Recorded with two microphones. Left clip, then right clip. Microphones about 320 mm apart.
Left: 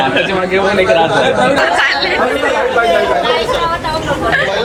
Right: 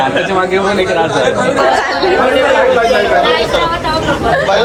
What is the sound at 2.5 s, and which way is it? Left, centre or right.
Speech, centre.